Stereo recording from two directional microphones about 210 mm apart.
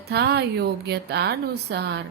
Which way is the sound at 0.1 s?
50° right (ahead or behind).